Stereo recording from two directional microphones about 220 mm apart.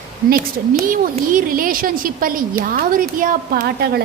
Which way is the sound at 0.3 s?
40° right (ahead or behind).